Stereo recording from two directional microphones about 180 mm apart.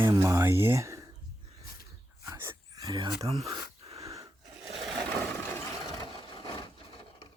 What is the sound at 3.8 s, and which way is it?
Sneeze, 35° right (ahead or behind).